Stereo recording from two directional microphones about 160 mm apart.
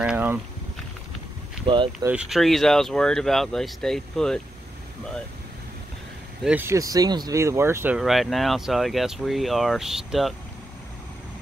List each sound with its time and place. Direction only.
0.0 s a sound: 10° right (ahead or behind)
1.9 s speech: 5° right (ahead or behind)
6.4 s speech: 10° right (ahead or behind)
8.0 s speech: centre (ahead or behind)